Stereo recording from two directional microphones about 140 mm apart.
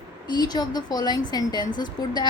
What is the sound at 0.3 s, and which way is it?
A woman's voice, 30° left (ahead or behind).